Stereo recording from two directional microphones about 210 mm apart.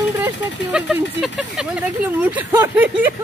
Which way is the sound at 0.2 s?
5° right (ahead or behind).